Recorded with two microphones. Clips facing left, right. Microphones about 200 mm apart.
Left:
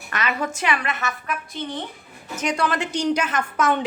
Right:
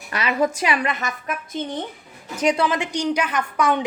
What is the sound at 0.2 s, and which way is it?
Speech, 10° right (ahead or behind).